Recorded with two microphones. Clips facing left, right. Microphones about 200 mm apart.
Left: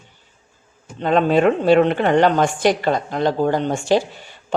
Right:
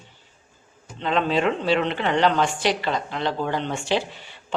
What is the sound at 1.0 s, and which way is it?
A woman's voice, 50° left (ahead or behind).